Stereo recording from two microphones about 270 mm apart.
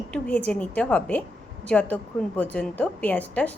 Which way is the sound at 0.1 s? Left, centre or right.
Centre.